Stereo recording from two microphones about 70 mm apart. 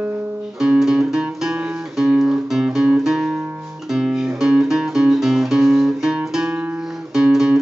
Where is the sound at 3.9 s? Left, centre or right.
Centre.